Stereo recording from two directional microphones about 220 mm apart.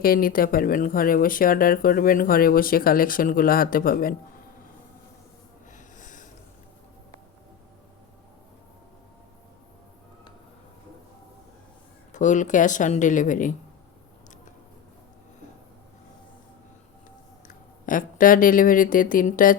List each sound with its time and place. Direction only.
0.0 s speech: 40° left (ahead or behind)
5.7 s snort: 35° left (ahead or behind)
12.1 s speech: 35° left (ahead or behind)
17.5 s speech: 35° left (ahead or behind)